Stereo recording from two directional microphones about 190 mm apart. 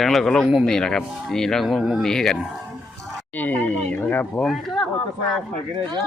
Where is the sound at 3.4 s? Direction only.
10° left (ahead or behind).